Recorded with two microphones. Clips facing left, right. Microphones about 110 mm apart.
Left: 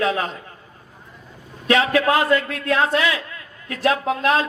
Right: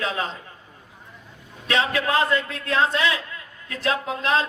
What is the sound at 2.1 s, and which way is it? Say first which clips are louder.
A man's voice: left 3 dB; 25° right (ahead or behind).